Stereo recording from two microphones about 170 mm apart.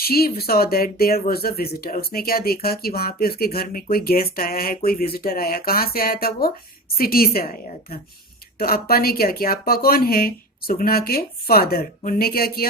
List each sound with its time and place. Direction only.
0.0 s speech: 65° left (ahead or behind)